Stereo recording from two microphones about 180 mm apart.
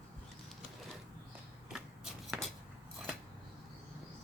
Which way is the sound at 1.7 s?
Centre (ahead or behind).